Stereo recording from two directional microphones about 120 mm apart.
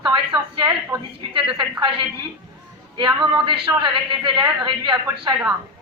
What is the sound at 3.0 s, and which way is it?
A woman's voice, 40° right (ahead or behind).